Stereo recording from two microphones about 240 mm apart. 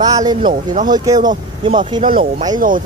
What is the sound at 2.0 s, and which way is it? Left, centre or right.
Speech, right.